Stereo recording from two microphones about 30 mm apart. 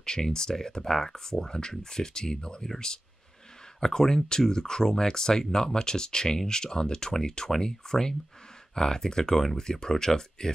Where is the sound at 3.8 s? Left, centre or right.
Centre.